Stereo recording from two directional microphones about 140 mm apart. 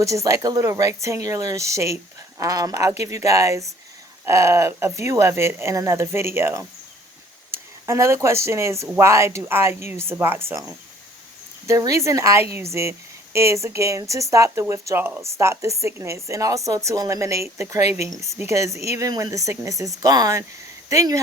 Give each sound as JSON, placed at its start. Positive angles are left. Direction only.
{"t": 0.0, "sound": "speech", "side_deg": -20}